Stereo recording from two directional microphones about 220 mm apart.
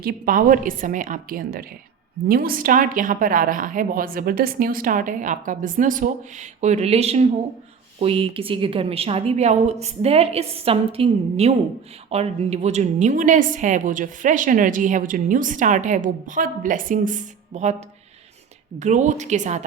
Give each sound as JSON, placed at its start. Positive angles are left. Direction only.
{"t": 0.0, "sound": "a woman's voice", "side_deg": -40}